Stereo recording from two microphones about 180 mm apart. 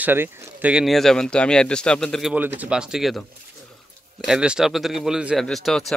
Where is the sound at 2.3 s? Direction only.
10° right (ahead or behind).